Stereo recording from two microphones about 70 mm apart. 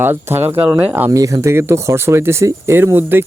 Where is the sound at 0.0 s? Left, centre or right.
Right.